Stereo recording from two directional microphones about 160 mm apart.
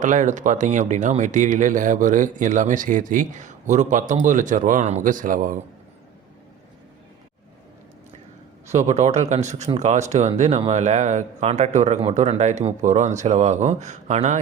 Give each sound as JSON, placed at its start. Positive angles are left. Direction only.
{"t": 0.0, "sound": "speech", "side_deg": -50}
{"t": 8.6, "sound": "speech", "side_deg": -45}